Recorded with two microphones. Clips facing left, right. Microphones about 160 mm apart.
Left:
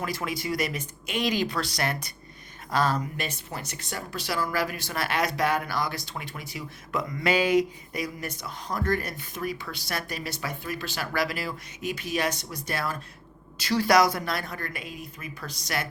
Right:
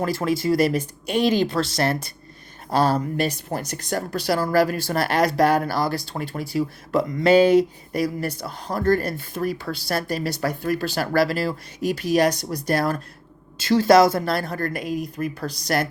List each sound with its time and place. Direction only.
0.0 s speech: 35° right (ahead or behind)
13.6 s speech: 25° right (ahead or behind)